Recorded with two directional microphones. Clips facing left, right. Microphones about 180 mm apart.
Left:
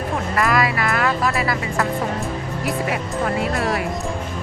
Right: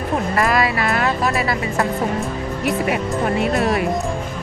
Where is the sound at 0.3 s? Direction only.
25° right (ahead or behind).